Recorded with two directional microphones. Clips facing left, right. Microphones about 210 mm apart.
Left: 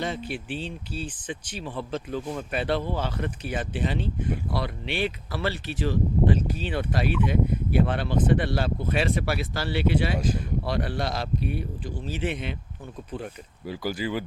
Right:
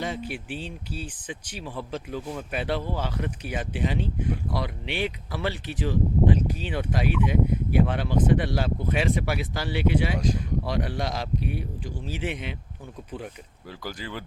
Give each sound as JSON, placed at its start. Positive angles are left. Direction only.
{"t": 0.0, "sound": "speech", "side_deg": -10}
{"t": 13.7, "sound": "speech", "side_deg": 10}